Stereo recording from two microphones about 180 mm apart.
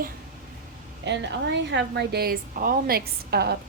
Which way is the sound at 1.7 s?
65° right (ahead or behind).